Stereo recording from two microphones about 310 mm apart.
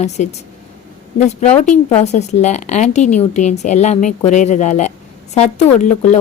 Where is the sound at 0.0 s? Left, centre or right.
Left.